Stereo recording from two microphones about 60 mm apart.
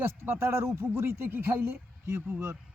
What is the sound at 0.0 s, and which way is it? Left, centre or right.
Speech, right.